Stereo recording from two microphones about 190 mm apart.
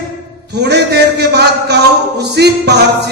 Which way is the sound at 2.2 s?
60° right (ahead or behind).